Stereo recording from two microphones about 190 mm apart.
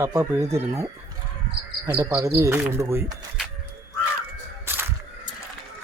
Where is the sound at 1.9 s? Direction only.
15° right (ahead or behind).